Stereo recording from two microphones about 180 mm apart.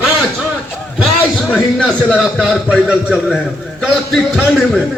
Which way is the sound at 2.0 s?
Centre (ahead or behind).